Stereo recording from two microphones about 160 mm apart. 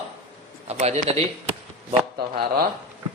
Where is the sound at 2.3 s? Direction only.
65° right (ahead or behind).